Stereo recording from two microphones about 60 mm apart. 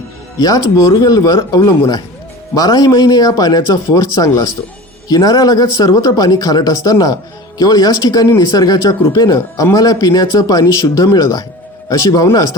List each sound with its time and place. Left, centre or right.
0.3 s speech: left
2.6 s speech: left
5.0 s speech: left
7.6 s speech: left
9.1 s speech: left